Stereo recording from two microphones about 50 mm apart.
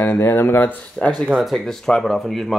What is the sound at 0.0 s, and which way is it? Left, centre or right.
Speech, left.